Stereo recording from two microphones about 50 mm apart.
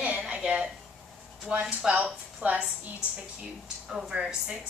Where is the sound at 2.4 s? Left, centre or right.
Right.